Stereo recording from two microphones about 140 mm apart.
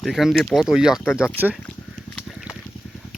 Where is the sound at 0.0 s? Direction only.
Centre (ahead or behind).